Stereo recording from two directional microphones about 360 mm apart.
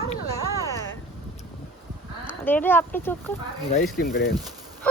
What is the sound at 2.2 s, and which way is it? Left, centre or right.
Speech, centre.